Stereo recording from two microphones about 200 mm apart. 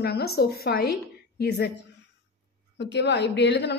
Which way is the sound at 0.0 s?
55° left (ahead or behind).